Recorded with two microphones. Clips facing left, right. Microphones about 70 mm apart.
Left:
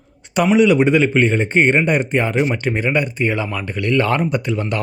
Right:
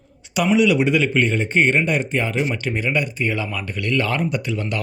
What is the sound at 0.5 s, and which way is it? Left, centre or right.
Speech, left.